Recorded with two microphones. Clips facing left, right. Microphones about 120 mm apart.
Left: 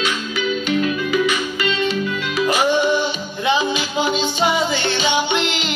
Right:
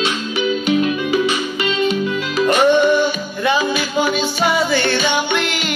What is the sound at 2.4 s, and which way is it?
Music, 5° left (ahead or behind).